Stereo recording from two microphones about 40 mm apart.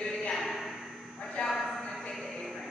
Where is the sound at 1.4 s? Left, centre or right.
Left.